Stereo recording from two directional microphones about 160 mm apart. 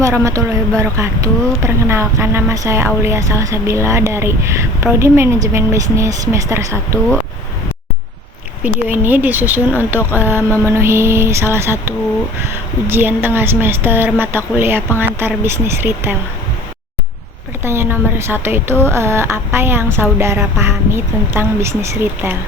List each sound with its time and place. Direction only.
0.0 s speech: 20° right (ahead or behind)
8.6 s speech: 10° right (ahead or behind)
17.6 s speech: 15° right (ahead or behind)